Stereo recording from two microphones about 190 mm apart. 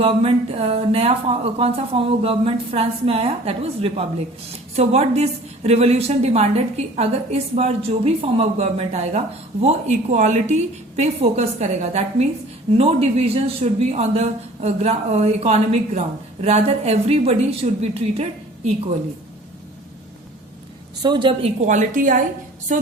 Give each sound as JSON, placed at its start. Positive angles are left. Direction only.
{"t": 0.0, "sound": "a woman's voice", "side_deg": -30}
{"t": 21.0, "sound": "a woman's voice", "side_deg": -25}
{"t": 21.7, "sound": "a woman's voice", "side_deg": -45}